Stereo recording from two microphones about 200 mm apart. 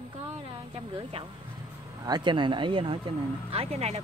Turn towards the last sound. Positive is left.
turn(degrees=-30)  # may be behind; listen again after turning